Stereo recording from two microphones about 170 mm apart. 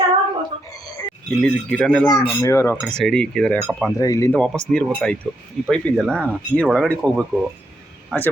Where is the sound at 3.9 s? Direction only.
20° left (ahead or behind).